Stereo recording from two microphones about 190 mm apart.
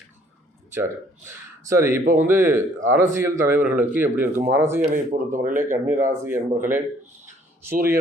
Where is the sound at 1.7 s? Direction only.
15° right (ahead or behind).